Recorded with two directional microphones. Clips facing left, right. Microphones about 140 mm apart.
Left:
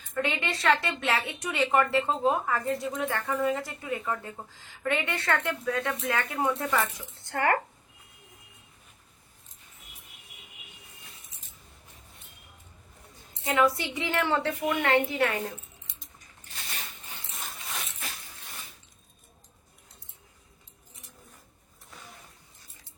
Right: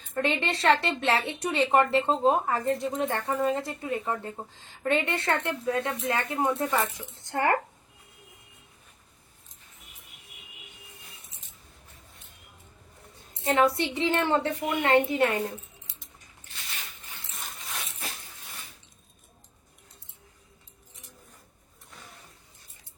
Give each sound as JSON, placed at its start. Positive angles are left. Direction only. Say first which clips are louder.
{"t": 0.3, "sound": "speech", "louder": "right 3 dB", "side_deg": -30}
{"t": 13.4, "sound": "a woman's voice", "louder": "right 2 dB", "side_deg": -30}
{"t": 17.2, "sound": "a sound", "louder": "left 1 dB", "side_deg": 0}